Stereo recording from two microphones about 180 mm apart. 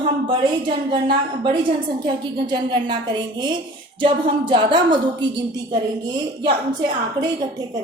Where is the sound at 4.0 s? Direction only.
25° right (ahead or behind).